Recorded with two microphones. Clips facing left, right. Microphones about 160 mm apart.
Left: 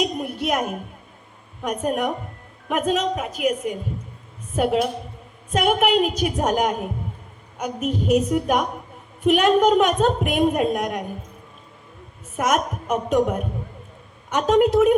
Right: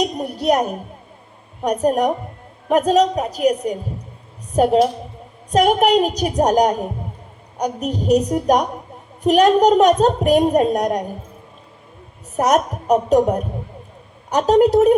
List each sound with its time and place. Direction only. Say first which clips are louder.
0.0 s a woman's voice: right 4 dB; 40° right (ahead or behind)
12.4 s a woman's voice: right 5 dB; 40° right (ahead or behind)